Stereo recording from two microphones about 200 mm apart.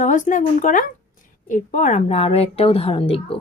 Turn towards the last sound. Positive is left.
turn(degrees=30)  # may be behind; listen again after turning